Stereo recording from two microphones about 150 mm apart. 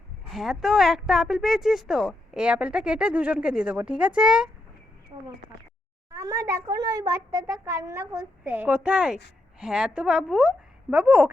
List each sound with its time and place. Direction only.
0.3 s speech: centre (ahead or behind)
6.1 s a child's voice: 20° right (ahead or behind)